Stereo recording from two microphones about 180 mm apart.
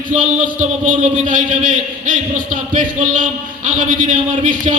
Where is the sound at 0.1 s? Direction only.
45° right (ahead or behind).